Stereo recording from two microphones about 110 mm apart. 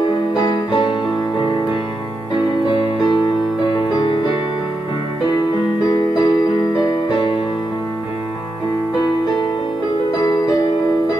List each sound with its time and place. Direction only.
0.3 s music: 40° left (ahead or behind)
2.7 s music: 50° left (ahead or behind)
5.9 s music: 35° left (ahead or behind)
10.1 s music: 40° left (ahead or behind)